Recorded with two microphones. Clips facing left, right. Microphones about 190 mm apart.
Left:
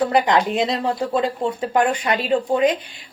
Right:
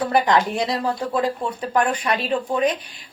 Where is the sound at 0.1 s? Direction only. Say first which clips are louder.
Left 1 dB; 20° left (ahead or behind).